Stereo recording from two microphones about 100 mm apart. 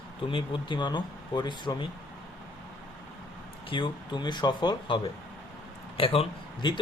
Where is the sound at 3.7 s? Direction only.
55° left (ahead or behind).